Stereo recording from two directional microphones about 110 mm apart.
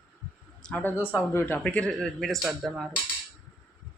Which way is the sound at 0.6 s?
15° left (ahead or behind).